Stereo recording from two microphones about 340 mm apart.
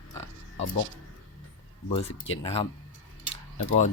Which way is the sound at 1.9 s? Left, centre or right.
Centre.